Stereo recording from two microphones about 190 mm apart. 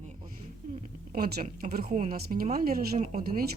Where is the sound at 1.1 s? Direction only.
50° right (ahead or behind).